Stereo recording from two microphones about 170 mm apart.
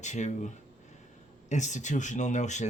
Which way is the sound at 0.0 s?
45° left (ahead or behind).